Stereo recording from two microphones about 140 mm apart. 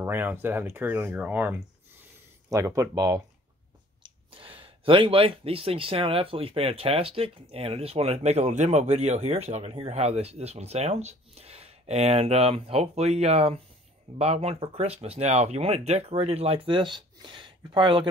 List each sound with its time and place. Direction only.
0.0 s speech: 15° right (ahead or behind)
2.5 s speech: 25° right (ahead or behind)
4.0 s speech: 40° right (ahead or behind)